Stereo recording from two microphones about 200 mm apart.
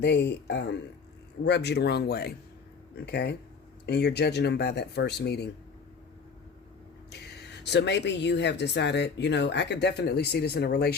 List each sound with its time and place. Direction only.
0.0 s speech: 60° left (ahead or behind)
7.1 s speech: 60° left (ahead or behind)